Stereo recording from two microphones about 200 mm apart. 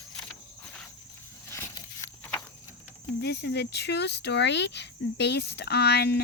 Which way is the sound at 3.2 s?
60° left (ahead or behind).